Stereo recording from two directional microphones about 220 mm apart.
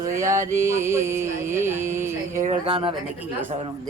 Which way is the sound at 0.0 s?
15° right (ahead or behind).